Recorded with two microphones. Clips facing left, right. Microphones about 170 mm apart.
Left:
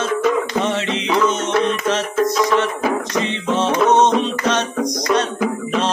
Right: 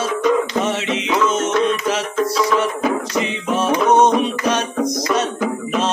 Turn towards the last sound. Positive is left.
turn(degrees=-10)  # may be behind; listen again after turning